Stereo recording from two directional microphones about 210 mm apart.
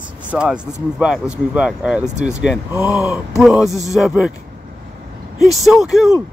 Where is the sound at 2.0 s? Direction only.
35° right (ahead or behind).